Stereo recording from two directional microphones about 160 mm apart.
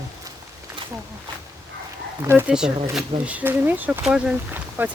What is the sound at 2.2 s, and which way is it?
Speech, 15° right (ahead or behind).